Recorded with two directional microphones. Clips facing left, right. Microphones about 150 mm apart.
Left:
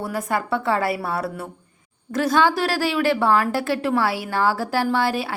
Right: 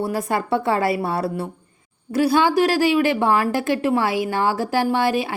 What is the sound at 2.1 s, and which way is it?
A woman's voice, 10° right (ahead or behind).